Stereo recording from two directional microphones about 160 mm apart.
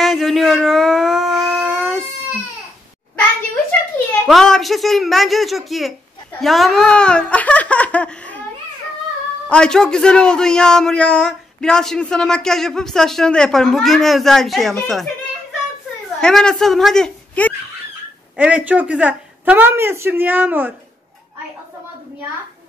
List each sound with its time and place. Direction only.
0.0 s a sound: centre (ahead or behind)
4.3 s a man's voice: centre (ahead or behind)
9.5 s a man's voice: 5° left (ahead or behind)
16.2 s a child's voice: 5° left (ahead or behind)
18.3 s speech: 10° right (ahead or behind)